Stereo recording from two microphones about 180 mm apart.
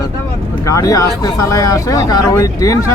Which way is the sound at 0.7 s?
20° left (ahead or behind).